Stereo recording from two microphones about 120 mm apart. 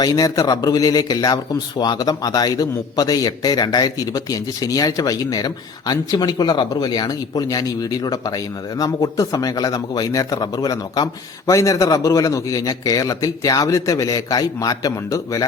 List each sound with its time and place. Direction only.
0.0 s a man's voice: 30° left (ahead or behind)